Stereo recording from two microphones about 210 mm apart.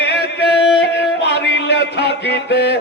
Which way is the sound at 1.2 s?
55° left (ahead or behind).